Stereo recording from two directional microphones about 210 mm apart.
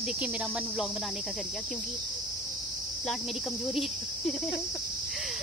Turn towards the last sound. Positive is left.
turn(degrees=0)  # may be behind; listen again after turning